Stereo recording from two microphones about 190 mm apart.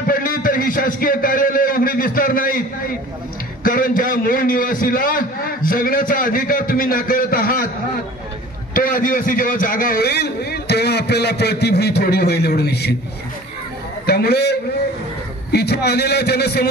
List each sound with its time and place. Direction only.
0.0 s a sound: 50° left (ahead or behind)
3.6 s a man's voice: 50° left (ahead or behind)
8.7 s a man's voice: 45° left (ahead or behind)
14.0 s a man's voice: 55° left (ahead or behind)